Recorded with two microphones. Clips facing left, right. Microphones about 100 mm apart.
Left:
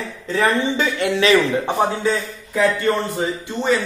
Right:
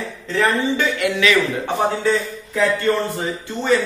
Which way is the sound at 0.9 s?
30° left (ahead or behind).